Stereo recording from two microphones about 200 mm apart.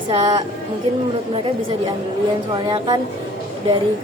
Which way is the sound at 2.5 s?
20° right (ahead or behind).